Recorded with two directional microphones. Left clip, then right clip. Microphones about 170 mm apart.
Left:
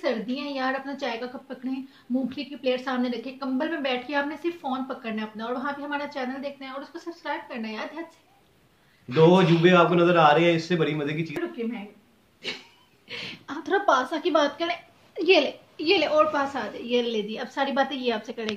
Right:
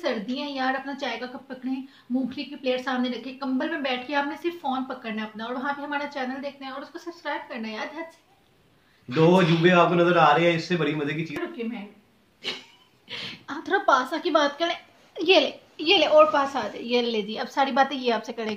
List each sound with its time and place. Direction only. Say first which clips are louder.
0.0 s a woman's voice: even; 5° right (ahead or behind)
9.6 s a man's voice: even; 20° left (ahead or behind)
12.4 s a woman's voice: right 2 dB; 5° right (ahead or behind); by 18.5 s 35° right (ahead or behind)